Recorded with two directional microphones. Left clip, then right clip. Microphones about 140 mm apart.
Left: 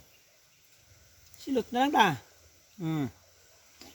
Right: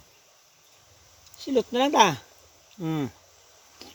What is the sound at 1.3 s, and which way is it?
Speech, 10° left (ahead or behind).